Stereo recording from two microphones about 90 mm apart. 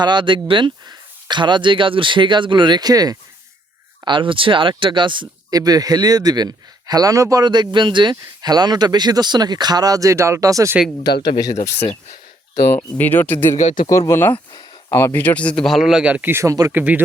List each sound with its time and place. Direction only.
0.0 s speech: 60° right (ahead or behind)
4.0 s speech: 65° right (ahead or behind)
5.5 s speech: 45° right (ahead or behind)
7.4 s speech: 55° right (ahead or behind)
8.4 s speech: 50° right (ahead or behind)
11.0 s speech: 55° left (ahead or behind)
12.6 s speech: 20° left (ahead or behind)
14.8 s speech: 35° left (ahead or behind)
15.1 s speech: 15° left (ahead or behind)
15.6 s speech: centre (ahead or behind)
16.3 s speech: 35° right (ahead or behind)
16.7 s speech: 15° right (ahead or behind)